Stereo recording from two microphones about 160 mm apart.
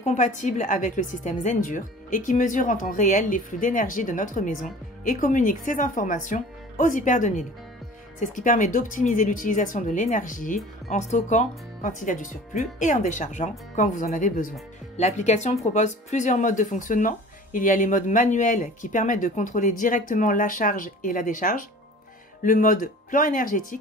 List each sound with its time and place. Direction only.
0.0 s speech: 50° left (ahead or behind)